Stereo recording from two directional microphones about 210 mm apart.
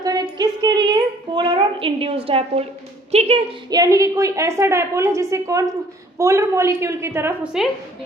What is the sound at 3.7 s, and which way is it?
A woman's voice, 15° right (ahead or behind).